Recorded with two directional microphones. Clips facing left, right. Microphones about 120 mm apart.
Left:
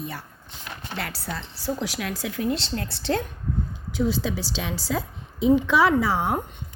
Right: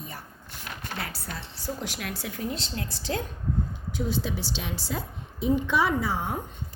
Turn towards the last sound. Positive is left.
turn(degrees=85)